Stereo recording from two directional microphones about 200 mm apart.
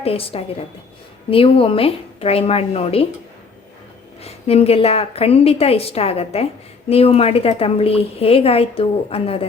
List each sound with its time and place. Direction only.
0.0 s a woman's voice: 30° left (ahead or behind)
4.2 s a woman's voice: 30° left (ahead or behind)